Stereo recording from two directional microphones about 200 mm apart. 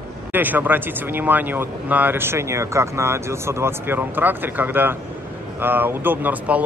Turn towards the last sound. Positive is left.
turn(degrees=-10)  # may be behind; listen again after turning